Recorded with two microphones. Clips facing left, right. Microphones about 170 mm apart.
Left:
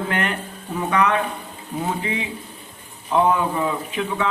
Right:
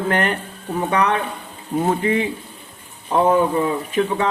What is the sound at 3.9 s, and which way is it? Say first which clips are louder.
Speech: right 4 dB; 45° right (ahead or behind).